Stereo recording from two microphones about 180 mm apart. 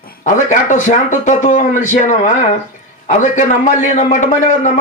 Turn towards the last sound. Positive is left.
turn(degrees=40)  # may be behind; listen again after turning